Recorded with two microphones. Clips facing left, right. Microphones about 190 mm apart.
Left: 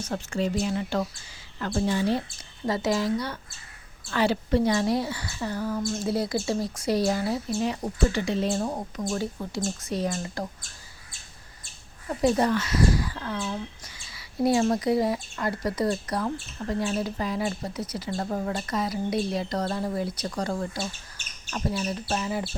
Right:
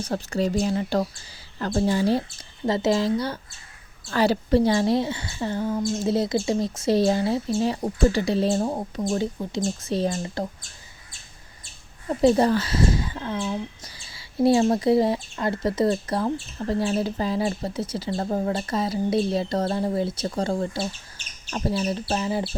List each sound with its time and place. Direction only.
0.0 s speech: 35° right (ahead or behind)
2.6 s speech: 25° right (ahead or behind)
12.0 s speech: 25° right (ahead or behind)